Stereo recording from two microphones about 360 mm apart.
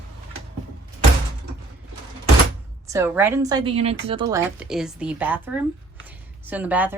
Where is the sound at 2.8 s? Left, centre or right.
Centre.